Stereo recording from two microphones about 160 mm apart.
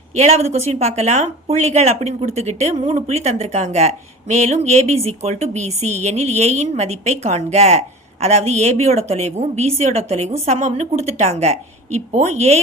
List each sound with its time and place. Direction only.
0.2 s speech: 40° right (ahead or behind)